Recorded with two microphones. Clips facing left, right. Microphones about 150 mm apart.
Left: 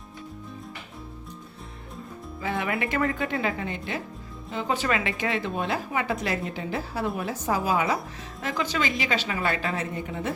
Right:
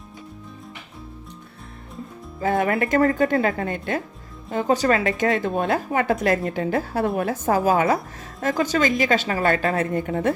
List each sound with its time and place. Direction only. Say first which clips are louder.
2.4 s speech: right 7 dB; 45° right (ahead or behind)